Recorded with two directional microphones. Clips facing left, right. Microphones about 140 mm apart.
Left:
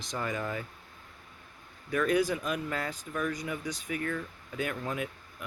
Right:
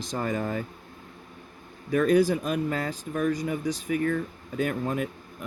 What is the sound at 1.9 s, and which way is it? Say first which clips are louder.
Speech: right 6 dB; 35° right (ahead or behind).